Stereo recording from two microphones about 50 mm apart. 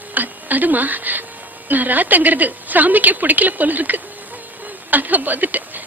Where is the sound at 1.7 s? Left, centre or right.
Right.